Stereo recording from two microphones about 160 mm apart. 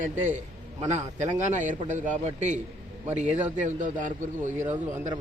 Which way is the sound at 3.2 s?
10° right (ahead or behind).